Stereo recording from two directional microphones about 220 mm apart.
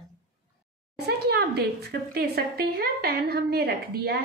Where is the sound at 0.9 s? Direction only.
45° right (ahead or behind).